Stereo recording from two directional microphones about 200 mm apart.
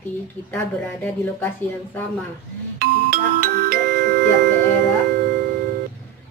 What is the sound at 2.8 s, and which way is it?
Music, 45° right (ahead or behind).